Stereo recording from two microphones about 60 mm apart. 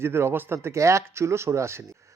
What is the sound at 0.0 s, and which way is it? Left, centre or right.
A man's voice, right.